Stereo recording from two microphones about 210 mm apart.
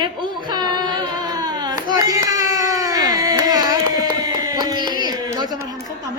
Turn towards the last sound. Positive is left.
turn(degrees=-20)  # may be behind; listen again after turning